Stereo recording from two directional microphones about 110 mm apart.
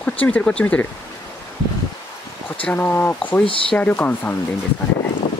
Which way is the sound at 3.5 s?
55° left (ahead or behind).